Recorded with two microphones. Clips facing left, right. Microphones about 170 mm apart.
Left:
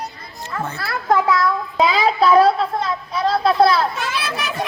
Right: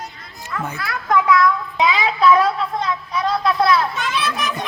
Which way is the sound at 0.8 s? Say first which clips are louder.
Left 1 dB; 35° left (ahead or behind).